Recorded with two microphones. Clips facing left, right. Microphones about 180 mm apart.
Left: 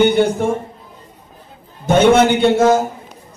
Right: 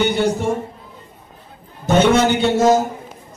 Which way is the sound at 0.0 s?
55° left (ahead or behind).